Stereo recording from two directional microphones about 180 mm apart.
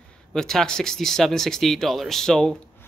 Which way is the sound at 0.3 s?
Centre (ahead or behind).